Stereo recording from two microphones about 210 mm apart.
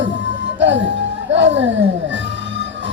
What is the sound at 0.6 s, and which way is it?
Music, 60° right (ahead or behind).